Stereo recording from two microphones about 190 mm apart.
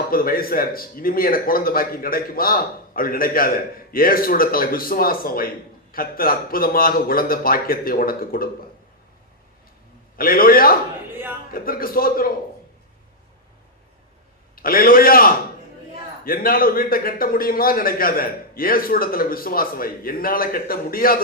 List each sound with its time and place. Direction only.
0.1 s a man's voice: 50° left (ahead or behind)
10.2 s a man's voice: 50° left (ahead or behind)
14.5 s a man's voice: 50° left (ahead or behind)